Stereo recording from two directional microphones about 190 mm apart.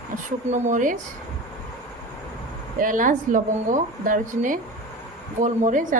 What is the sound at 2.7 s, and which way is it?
Speech, 45° right (ahead or behind).